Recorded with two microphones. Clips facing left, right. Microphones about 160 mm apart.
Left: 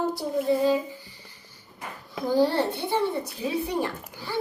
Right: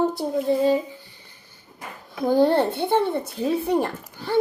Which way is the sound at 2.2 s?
55° right (ahead or behind).